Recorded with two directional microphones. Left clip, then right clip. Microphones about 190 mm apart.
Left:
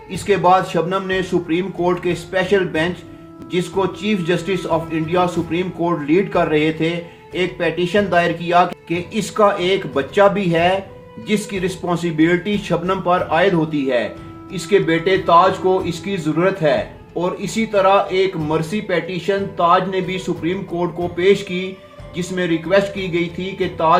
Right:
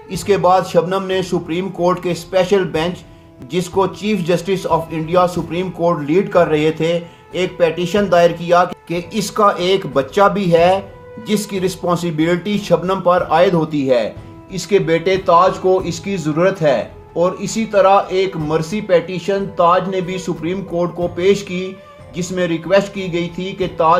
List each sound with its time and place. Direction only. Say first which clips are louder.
0.1 s speech: right 1 dB; 40° right (ahead or behind)